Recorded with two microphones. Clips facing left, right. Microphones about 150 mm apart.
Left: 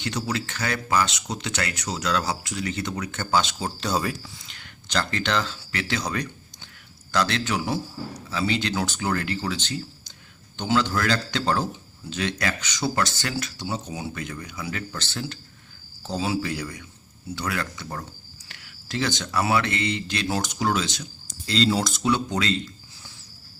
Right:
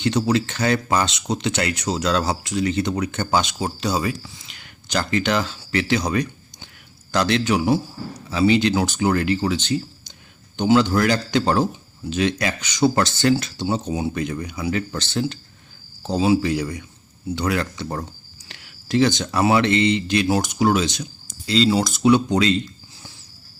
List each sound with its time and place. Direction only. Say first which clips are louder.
0.3 s speech: right 8 dB; 25° right (ahead or behind)
13.0 s speech: right 8 dB; 25° right (ahead or behind)
21.4 s speech: right 4 dB; centre (ahead or behind); by 22.6 s 20° right (ahead or behind)